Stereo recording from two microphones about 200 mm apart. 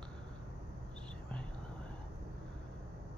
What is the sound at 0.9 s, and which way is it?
Whispering, 5° left (ahead or behind).